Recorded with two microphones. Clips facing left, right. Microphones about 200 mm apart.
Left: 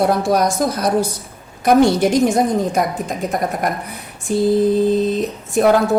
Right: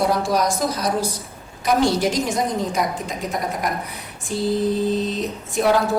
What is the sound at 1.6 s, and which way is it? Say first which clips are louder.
A woman's voice: left 6 dB; 55° left (ahead or behind).